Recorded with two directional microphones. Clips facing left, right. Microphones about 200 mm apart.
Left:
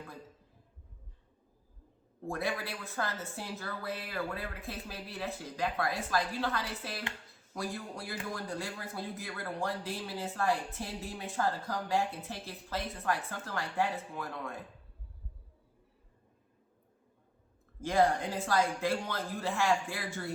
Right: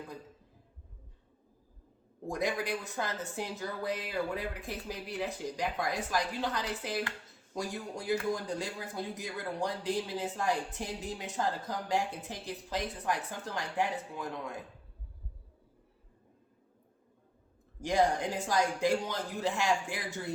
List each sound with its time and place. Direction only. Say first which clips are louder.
2.2 s speech: right 2 dB; 15° right (ahead or behind)
17.8 s speech: even; 15° right (ahead or behind)